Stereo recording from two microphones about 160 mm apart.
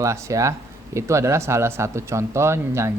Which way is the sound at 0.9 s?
20° right (ahead or behind).